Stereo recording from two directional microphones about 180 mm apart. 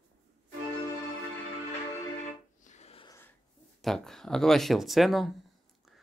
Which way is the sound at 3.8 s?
Centre (ahead or behind).